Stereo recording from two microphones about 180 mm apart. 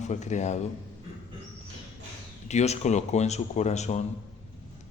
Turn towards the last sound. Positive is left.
turn(degrees=40)  # may be behind; listen again after turning